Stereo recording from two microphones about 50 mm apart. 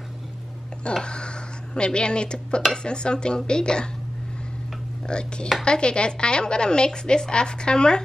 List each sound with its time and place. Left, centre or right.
1.0 s a woman's voice: centre
5.0 s a woman's voice: centre